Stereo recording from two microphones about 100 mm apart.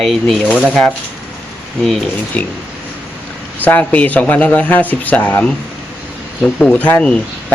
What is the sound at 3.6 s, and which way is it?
Speech, 15° left (ahead or behind).